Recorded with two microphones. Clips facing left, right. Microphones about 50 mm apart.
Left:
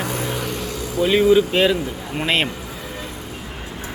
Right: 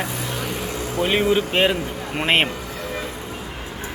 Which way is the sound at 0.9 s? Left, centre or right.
Right.